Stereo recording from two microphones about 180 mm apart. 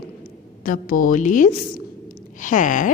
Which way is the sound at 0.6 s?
50° left (ahead or behind).